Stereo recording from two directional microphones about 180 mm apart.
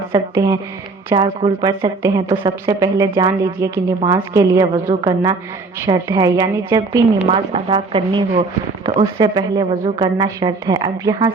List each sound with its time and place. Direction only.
0.1 s a woman's voice: 20° right (ahead or behind)
7.3 s a woman's voice: 30° right (ahead or behind)